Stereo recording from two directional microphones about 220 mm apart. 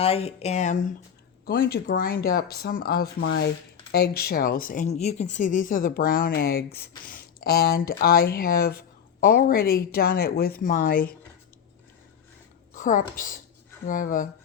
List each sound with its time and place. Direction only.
0.0 s speech: 25° left (ahead or behind)
1.5 s speech: 45° left (ahead or behind)
12.7 s speech: 35° left (ahead or behind)